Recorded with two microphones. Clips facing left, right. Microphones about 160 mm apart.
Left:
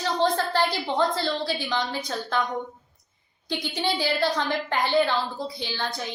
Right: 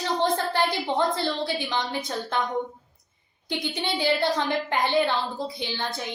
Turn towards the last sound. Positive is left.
turn(degrees=-20)  # may be behind; listen again after turning